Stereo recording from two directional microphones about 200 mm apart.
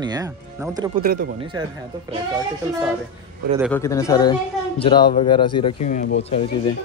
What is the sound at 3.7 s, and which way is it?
Speech, 15° left (ahead or behind).